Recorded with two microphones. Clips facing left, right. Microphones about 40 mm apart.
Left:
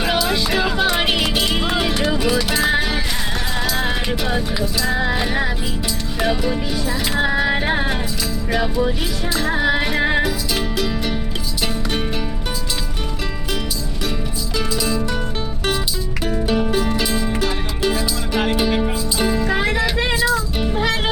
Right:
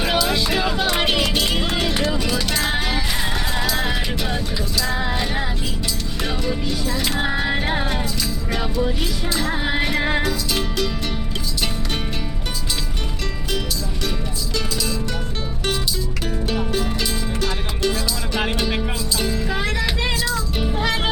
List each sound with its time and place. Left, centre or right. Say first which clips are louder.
0.0 s music: left 1 dB; centre
14.5 s music: left 4 dB; centre
16.5 s music: left 4 dB; centre